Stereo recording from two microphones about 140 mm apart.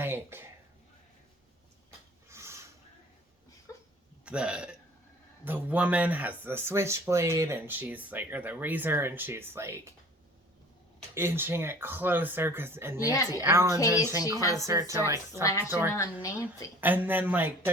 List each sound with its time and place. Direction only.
0.0 s speech: 15° right (ahead or behind)
2.3 s a sound: 20° right (ahead or behind)
3.7 s a sound: 20° left (ahead or behind)
4.3 s speech: 5° right (ahead or behind)
11.1 s speech: 15° right (ahead or behind)
13.1 s a woman's voice: 25° left (ahead or behind)
13.4 s speech: 20° right (ahead or behind)
16.2 s a woman's voice: 25° left (ahead or behind)
16.8 s speech: 15° right (ahead or behind)